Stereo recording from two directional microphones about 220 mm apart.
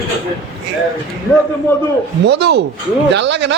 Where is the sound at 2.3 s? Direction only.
50° right (ahead or behind).